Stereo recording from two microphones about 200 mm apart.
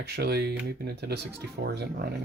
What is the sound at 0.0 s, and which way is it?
Speech, 55° right (ahead or behind).